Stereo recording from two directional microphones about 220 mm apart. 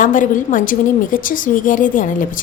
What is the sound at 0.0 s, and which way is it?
A woman's voice, 35° left (ahead or behind).